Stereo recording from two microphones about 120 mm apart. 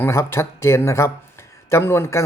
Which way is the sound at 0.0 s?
20° left (ahead or behind).